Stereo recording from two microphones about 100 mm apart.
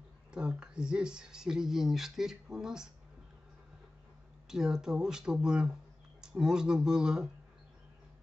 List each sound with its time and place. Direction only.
0.3 s speech: 10° right (ahead or behind)
4.5 s speech: 5° right (ahead or behind)